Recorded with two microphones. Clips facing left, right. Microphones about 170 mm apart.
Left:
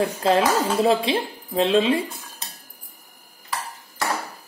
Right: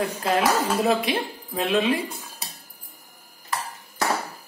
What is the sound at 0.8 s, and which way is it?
Speech, 30° left (ahead or behind).